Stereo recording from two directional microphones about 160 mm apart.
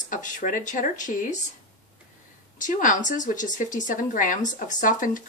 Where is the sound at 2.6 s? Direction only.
55° left (ahead or behind).